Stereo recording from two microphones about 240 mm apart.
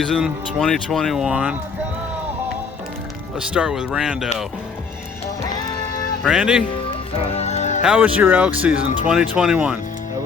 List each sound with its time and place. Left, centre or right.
0.1 s speech: centre
3.3 s speech: centre
6.2 s speech: centre
7.3 s music: left
7.8 s speech: centre